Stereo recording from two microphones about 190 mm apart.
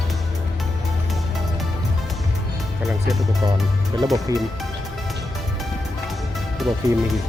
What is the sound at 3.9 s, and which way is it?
Speech, 20° right (ahead or behind).